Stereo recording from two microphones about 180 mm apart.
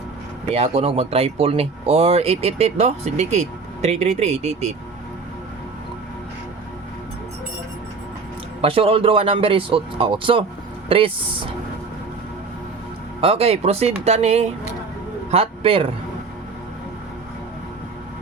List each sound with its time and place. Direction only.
0.5 s speech: 35° right (ahead or behind)
8.6 s speech: 30° right (ahead or behind)
13.2 s a man's voice: 35° right (ahead or behind)